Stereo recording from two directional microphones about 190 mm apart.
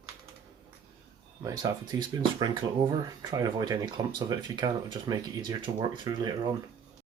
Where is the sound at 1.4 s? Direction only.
20° right (ahead or behind).